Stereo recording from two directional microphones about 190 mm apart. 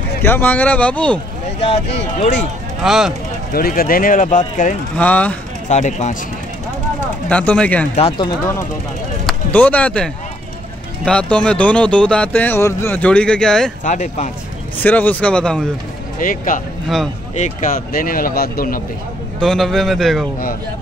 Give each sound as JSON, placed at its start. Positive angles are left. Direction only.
{"t": 0.2, "sound": "speech", "side_deg": 10}
{"t": 1.6, "sound": "speech", "side_deg": 35}
{"t": 2.8, "sound": "speech", "side_deg": 0}
{"t": 3.5, "sound": "speech", "side_deg": 50}
{"t": 4.9, "sound": "speech", "side_deg": 5}
{"t": 5.7, "sound": "speech", "side_deg": 35}
{"t": 7.2, "sound": "speech", "side_deg": 5}
{"t": 9.2, "sound": "speech", "side_deg": 10}
{"t": 13.8, "sound": "speech", "side_deg": 40}
{"t": 14.8, "sound": "speech", "side_deg": 10}
{"t": 16.2, "sound": "speech", "side_deg": 45}
{"t": 19.4, "sound": "speech", "side_deg": 0}